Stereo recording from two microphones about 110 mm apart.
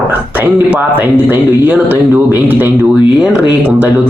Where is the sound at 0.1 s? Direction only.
15° right (ahead or behind).